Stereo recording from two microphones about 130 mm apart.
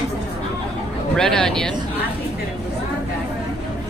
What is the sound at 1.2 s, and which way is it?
Speech, 5° left (ahead or behind).